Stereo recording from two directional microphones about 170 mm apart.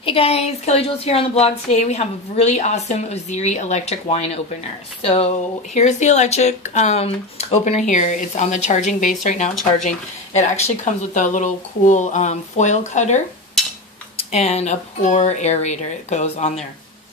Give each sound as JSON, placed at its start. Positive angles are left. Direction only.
{"t": 0.0, "sound": "speech", "side_deg": 35}
{"t": 14.3, "sound": "speech", "side_deg": 40}